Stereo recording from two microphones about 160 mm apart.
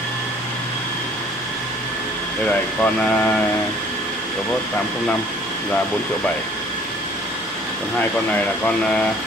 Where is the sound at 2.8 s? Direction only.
10° left (ahead or behind).